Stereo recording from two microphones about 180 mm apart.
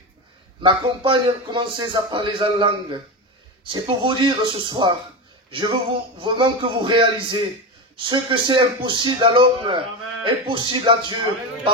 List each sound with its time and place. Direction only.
0.6 s a man's voice: 25° right (ahead or behind)